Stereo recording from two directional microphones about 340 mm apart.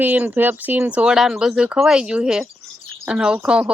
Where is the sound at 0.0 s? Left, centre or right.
Centre.